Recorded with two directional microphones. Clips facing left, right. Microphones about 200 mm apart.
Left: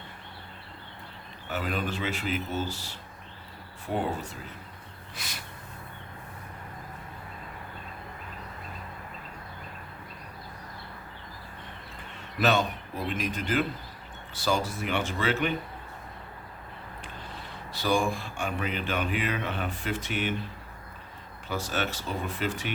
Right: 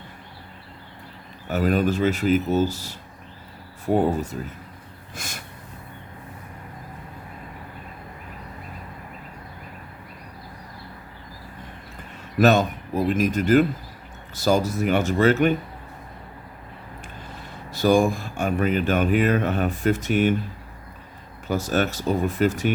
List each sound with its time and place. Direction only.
1.5 s speech: 45° right (ahead or behind)
12.4 s speech: 45° right (ahead or behind)
17.7 s speech: 45° right (ahead or behind)
21.4 s speech: 45° right (ahead or behind)